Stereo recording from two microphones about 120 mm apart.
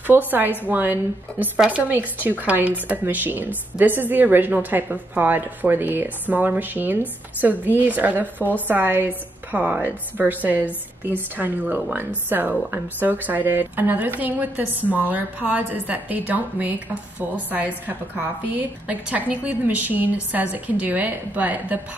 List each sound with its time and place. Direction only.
0.0 s a woman's voice: 15° right (ahead or behind)